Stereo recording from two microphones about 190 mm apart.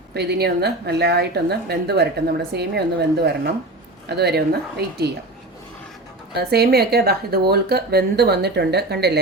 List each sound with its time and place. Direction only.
0.1 s speech: 60° right (ahead or behind)
6.3 s speech: 55° right (ahead or behind)